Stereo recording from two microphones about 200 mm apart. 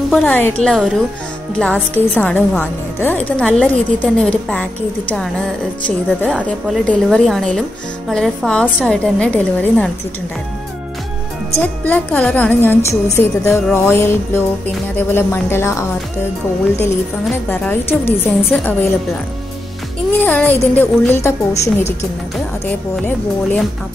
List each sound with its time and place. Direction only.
0.1 s a woman's voice: 5° left (ahead or behind)
11.5 s a woman's voice: 10° left (ahead or behind)
17.5 s a woman's voice: 10° left (ahead or behind)
20.2 s a woman's voice: 10° left (ahead or behind)
22.9 s a woman's voice: 5° left (ahead or behind)